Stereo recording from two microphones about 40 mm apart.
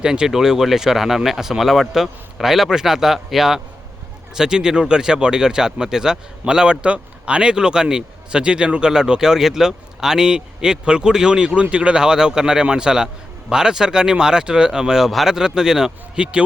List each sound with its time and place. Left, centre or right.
0.0 s speech: centre